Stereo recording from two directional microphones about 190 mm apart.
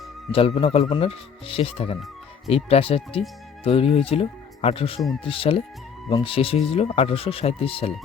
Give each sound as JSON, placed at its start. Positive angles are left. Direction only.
{"t": 0.3, "sound": "speech", "side_deg": 30}